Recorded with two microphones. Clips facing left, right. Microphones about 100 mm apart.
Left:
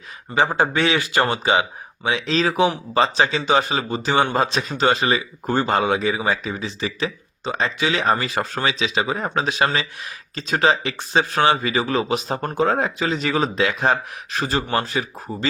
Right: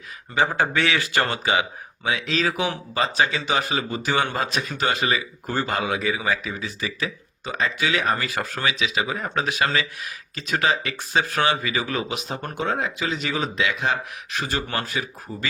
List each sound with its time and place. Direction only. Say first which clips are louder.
0.3 s speech: left 3 dB; 20° left (ahead or behind)